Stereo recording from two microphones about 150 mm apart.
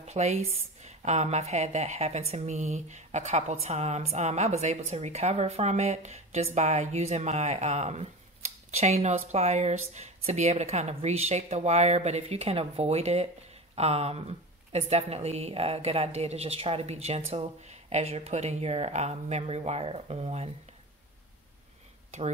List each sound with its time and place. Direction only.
0.0 s a woman's voice: 50° right (ahead or behind)